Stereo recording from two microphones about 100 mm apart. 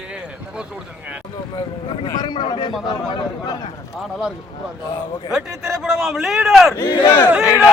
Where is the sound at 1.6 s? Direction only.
60° left (ahead or behind).